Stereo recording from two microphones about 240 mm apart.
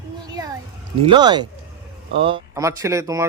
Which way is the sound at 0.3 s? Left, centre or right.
Centre.